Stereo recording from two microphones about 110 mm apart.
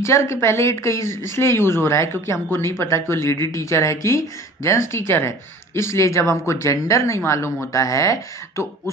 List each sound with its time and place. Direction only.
0.0 s speech: 25° left (ahead or behind)